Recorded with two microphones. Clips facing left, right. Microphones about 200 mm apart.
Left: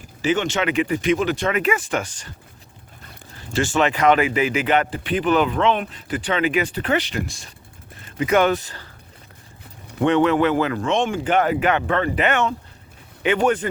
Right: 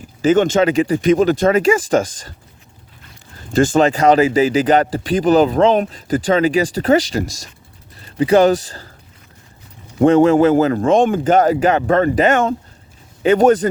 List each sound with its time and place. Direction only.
0.2 s speech: 45° right (ahead or behind)
3.3 s speech: 40° right (ahead or behind)
10.0 s speech: 35° right (ahead or behind)